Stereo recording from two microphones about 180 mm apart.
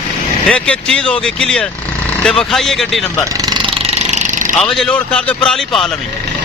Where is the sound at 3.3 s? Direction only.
20° right (ahead or behind); by 4.5 s 40° right (ahead or behind).